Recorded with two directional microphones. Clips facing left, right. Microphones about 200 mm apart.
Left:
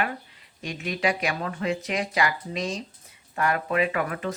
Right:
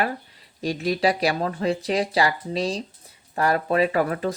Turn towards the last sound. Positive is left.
turn(degrees=-35)  # may be behind; listen again after turning